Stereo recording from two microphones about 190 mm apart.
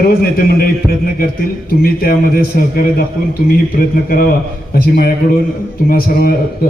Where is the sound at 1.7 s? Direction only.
50° left (ahead or behind).